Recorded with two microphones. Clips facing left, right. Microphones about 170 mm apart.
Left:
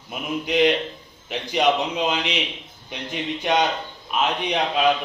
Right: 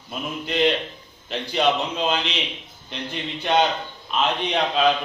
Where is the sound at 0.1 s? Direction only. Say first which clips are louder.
Left 3 dB; 10° left (ahead or behind).